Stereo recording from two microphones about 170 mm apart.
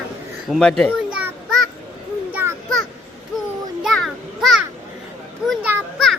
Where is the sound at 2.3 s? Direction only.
10° right (ahead or behind).